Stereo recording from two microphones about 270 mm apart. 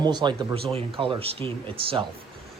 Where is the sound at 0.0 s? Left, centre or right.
Centre.